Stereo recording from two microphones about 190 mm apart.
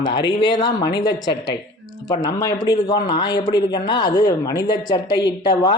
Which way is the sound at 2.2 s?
20° left (ahead or behind).